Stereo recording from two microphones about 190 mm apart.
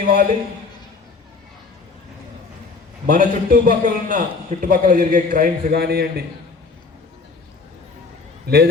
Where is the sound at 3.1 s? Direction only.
45° right (ahead or behind).